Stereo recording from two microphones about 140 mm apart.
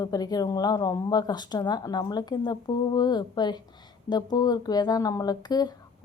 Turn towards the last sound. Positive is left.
turn(degrees=30)  # may be behind; listen again after turning